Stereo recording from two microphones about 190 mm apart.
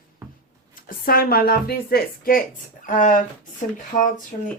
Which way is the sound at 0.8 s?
50° left (ahead or behind).